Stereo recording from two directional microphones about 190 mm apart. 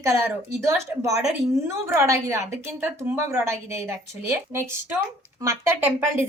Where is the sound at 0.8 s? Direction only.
15° right (ahead or behind).